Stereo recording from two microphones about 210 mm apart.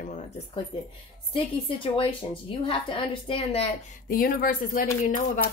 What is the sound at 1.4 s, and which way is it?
A woman's voice, 25° left (ahead or behind).